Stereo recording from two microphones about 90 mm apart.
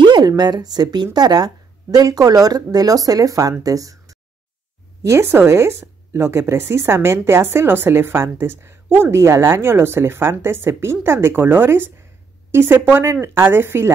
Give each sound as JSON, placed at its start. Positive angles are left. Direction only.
{"t": 0.4, "sound": "speech", "side_deg": -50}